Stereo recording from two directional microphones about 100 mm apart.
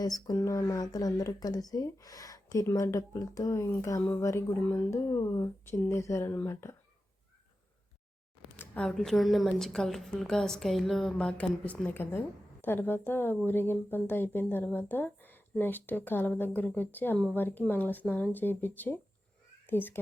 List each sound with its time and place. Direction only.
0.0 s speech: 40° left (ahead or behind)
0.3 s speech: 30° left (ahead or behind)
8.5 s a woman's voice: 10° left (ahead or behind)
11.3 s a woman's voice: 15° left (ahead or behind)